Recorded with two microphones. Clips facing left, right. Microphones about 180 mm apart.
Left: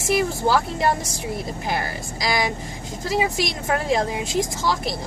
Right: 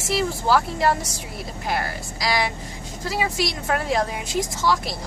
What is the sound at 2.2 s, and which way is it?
A woman's voice, 20° left (ahead or behind).